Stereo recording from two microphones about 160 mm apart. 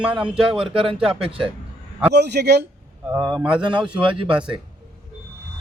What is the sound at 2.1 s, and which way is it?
Speech, 90° right.